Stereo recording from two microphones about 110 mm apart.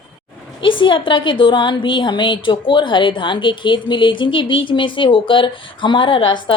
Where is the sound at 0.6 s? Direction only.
50° left (ahead or behind).